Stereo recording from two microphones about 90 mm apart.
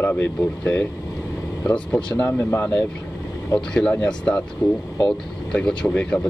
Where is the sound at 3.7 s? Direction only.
15° left (ahead or behind).